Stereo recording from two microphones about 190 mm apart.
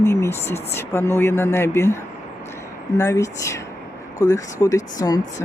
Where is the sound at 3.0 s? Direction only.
15° left (ahead or behind).